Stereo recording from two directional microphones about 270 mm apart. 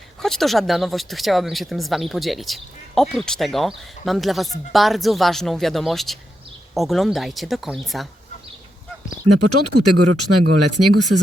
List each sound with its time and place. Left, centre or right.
0.2 s speech: centre
9.3 s speech: right